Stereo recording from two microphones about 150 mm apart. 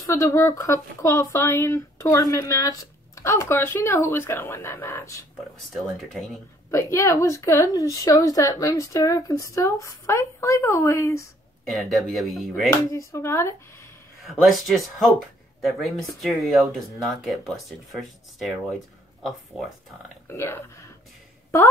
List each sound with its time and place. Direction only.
0.0 s a woman's voice: 20° left (ahead or behind)
6.7 s a woman's voice: 20° left (ahead or behind)
11.7 s speech: centre (ahead or behind)
12.9 s speech: 20° left (ahead or behind)
14.2 s speech: centre (ahead or behind)
16.2 s speech: centre (ahead or behind)
20.2 s speech: 15° left (ahead or behind)